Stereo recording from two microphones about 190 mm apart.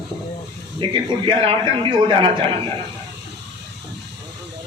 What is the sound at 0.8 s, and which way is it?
A man's voice, 25° right (ahead or behind).